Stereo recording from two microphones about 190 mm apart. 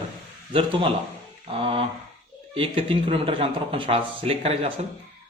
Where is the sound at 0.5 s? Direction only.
25° right (ahead or behind).